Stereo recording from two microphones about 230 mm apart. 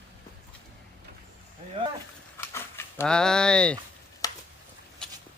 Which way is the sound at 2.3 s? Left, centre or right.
Centre.